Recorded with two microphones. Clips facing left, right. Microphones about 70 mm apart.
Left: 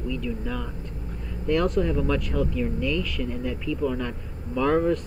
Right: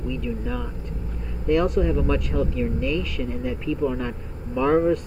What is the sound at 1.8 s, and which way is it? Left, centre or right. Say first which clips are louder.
Speech: right 2 dB; centre.